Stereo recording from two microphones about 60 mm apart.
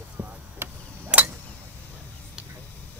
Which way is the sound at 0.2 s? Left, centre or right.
Right.